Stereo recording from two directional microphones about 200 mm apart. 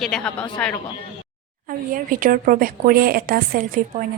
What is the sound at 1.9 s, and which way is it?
A woman's voice, 45° right (ahead or behind).